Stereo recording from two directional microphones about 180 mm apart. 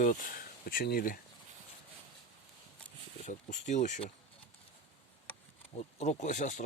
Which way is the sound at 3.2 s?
40° left (ahead or behind).